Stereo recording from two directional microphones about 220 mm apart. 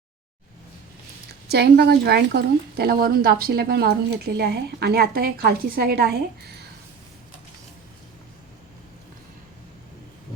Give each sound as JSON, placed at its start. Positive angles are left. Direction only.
{"t": 1.5, "sound": "a woman's voice", "side_deg": -50}